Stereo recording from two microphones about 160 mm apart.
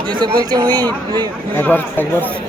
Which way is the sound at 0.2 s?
25° right (ahead or behind).